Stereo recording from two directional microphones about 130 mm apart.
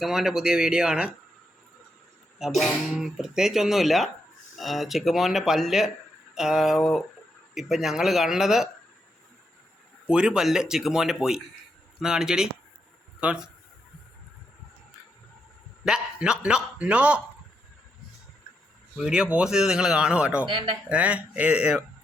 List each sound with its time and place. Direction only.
0.0 s speech: 5° right (ahead or behind)
2.4 s speech: 5° right (ahead or behind)
10.1 s speech: 5° right (ahead or behind)
15.8 s a man's voice: 5° right (ahead or behind)
18.9 s speech: 5° right (ahead or behind)
20.4 s speech: 40° right (ahead or behind)
20.9 s a man's voice: 10° right (ahead or behind)